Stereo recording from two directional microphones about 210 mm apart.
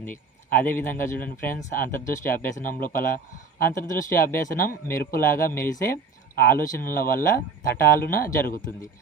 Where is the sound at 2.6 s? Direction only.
40° left (ahead or behind).